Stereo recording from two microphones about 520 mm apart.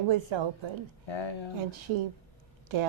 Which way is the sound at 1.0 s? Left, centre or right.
Left.